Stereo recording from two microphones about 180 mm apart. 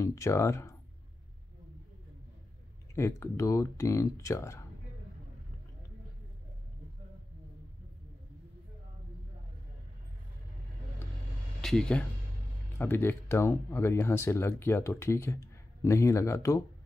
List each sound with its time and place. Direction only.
0.0 s speech: 15° left (ahead or behind)
2.9 s speech: 15° left (ahead or behind)
11.6 s speech: 5° left (ahead or behind)